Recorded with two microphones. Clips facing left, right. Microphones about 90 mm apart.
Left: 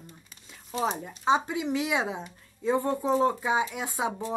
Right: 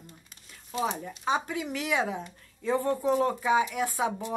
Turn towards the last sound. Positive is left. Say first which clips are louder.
# right 2 dB
turn(degrees=20)  # may be behind; listen again after turning